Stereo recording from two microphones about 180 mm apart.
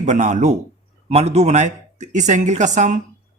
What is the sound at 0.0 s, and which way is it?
Speech, 40° right (ahead or behind).